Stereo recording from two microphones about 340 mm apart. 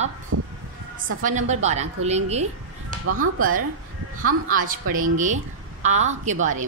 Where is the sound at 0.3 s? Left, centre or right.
Right.